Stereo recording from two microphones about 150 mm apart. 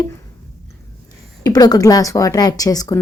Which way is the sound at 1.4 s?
25° left (ahead or behind).